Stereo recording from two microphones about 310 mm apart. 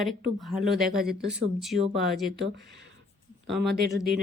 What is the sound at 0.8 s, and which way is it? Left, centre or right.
Speech, right.